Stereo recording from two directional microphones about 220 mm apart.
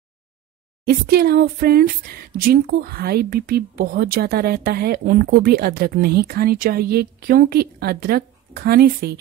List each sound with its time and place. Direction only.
0.8 s speech: 45° right (ahead or behind)